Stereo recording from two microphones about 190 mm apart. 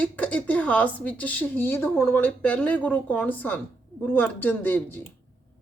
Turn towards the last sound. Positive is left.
turn(degrees=10)  # may be behind; listen again after turning